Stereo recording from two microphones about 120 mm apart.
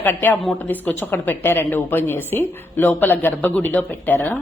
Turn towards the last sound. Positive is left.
turn(degrees=15)  # may be behind; listen again after turning